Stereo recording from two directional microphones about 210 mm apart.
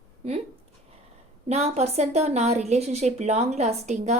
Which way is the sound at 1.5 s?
30° right (ahead or behind).